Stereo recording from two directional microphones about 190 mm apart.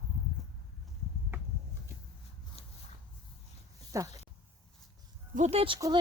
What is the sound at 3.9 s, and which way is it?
Speech, 15° right (ahead or behind).